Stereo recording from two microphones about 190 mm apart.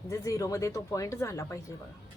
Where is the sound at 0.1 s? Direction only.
15° left (ahead or behind).